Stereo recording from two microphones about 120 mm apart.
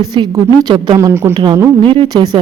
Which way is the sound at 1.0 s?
20° right (ahead or behind).